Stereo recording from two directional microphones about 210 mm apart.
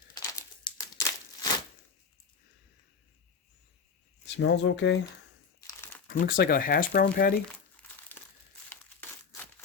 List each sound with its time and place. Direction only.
0.1 s crumpling: 15° left (ahead or behind)
4.4 s speech: 60° left (ahead or behind)
6.1 s speech: 45° left (ahead or behind)
8.7 s crumpling: 10° left (ahead or behind)